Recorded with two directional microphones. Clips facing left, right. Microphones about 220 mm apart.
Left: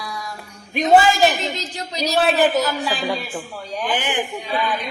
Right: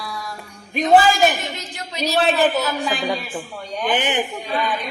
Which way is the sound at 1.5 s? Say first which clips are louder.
Left 4 dB; 35° left (ahead or behind).